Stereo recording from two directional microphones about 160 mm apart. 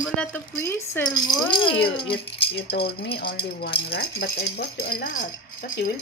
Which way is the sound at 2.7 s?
85° left.